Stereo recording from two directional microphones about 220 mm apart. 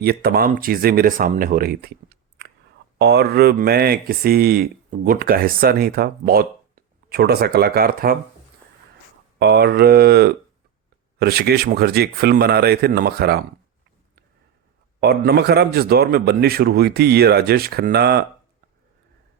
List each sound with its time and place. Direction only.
0.0 s speech: 45° right (ahead or behind)
9.4 s speech: 50° right (ahead or behind)
15.0 s speech: 45° right (ahead or behind)